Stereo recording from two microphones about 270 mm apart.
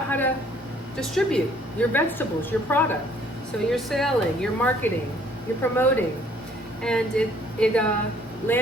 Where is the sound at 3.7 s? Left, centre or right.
Centre.